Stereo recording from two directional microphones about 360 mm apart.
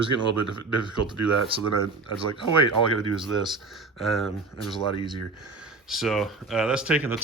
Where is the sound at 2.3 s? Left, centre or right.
Centre.